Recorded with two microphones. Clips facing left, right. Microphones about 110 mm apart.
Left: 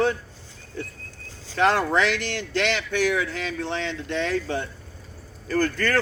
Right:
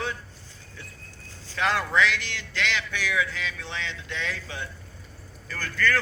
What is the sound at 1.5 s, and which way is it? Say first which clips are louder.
A man's voice: left 4 dB; 45° left (ahead or behind).